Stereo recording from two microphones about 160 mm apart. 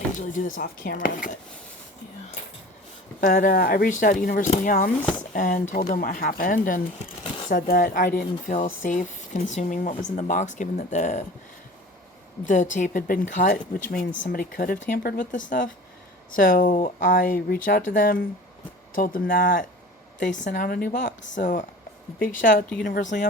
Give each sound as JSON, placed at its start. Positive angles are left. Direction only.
{"t": 0.3, "sound": "speech", "side_deg": 55}
{"t": 3.2, "sound": "speech", "side_deg": 60}
{"t": 12.5, "sound": "speech", "side_deg": 50}